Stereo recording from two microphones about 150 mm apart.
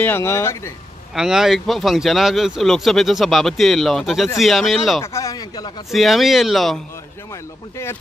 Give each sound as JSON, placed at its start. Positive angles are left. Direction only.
{"t": 0.0, "sound": "speech", "side_deg": 15}
{"t": 1.1, "sound": "speech", "side_deg": -5}
{"t": 5.0, "sound": "speech", "side_deg": 20}
{"t": 5.9, "sound": "speech", "side_deg": 0}